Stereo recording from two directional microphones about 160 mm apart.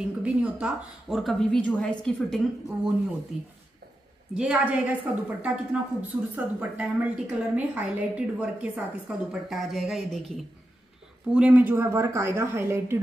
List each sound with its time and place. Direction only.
0.2 s a woman's voice: 10° right (ahead or behind)
4.4 s speech: 5° right (ahead or behind)